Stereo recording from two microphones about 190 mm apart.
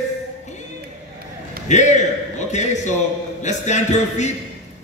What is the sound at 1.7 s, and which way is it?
A man's voice, 40° left (ahead or behind).